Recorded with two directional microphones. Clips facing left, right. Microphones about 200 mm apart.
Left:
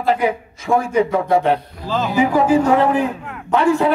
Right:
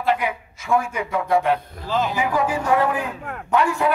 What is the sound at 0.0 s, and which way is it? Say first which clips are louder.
A man's voice: left 5 dB; 35° left (ahead or behind).